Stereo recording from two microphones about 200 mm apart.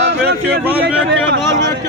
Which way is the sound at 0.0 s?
60° right (ahead or behind).